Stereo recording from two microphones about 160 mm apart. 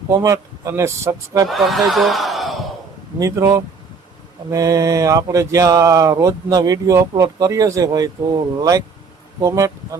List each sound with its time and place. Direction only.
0.1 s speech: 20° right (ahead or behind)
1.5 s speech: centre (ahead or behind)
3.2 s speech: 20° right (ahead or behind)